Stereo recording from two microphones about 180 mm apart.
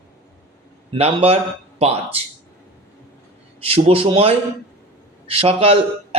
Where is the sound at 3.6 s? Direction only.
35° right (ahead or behind).